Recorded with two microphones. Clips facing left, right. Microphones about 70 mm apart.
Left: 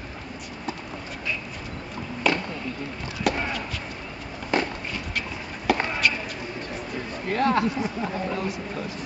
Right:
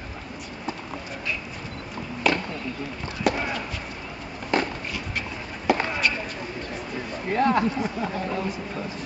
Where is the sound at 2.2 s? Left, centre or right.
Centre.